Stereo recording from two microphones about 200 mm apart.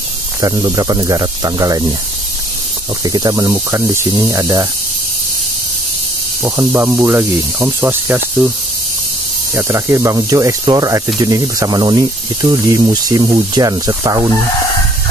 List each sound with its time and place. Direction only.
0.4 s speech: 20° right (ahead or behind)
3.0 s speech: 20° right (ahead or behind)
6.4 s speech: 10° right (ahead or behind)
9.6 s speech: 15° right (ahead or behind)